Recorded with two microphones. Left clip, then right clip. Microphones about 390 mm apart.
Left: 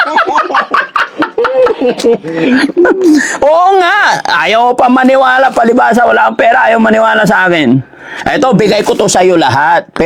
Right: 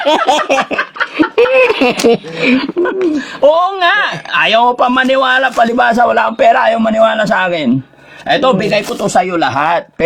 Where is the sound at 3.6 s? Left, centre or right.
Left.